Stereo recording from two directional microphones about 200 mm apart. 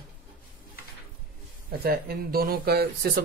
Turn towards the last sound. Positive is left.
turn(degrees=-50)  # may be behind; listen again after turning